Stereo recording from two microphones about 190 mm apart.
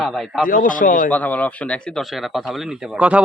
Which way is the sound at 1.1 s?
10° left (ahead or behind).